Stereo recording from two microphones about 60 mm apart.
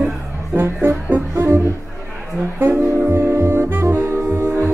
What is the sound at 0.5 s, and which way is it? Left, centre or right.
Speech, right.